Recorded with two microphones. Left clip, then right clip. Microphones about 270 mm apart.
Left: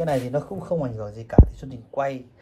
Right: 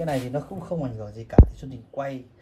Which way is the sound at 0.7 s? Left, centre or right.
Left.